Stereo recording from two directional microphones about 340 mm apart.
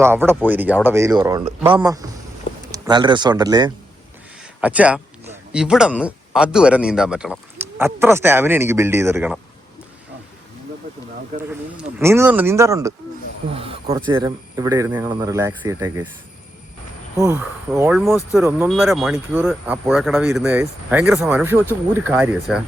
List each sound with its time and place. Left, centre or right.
0.0 s speech: centre
11.7 s speech: centre
13.5 s snake: centre
14.1 s speech: centre
17.2 s speech: centre